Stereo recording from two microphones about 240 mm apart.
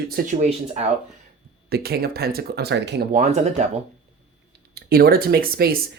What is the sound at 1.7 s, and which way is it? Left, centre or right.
Speech, right.